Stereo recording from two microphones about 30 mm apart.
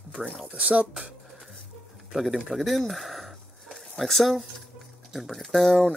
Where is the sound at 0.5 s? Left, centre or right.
Right.